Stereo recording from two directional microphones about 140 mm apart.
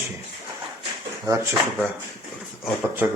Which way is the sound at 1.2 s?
20° right (ahead or behind).